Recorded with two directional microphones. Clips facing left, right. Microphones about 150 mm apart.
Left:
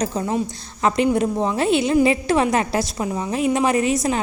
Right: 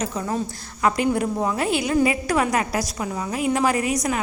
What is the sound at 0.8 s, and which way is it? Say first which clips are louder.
A woman's voice: left 3 dB; 25° left (ahead or behind).